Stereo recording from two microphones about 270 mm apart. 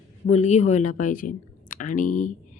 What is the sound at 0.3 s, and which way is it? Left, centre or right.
Speech, left.